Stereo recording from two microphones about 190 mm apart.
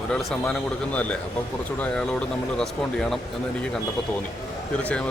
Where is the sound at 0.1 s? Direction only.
5° left (ahead or behind).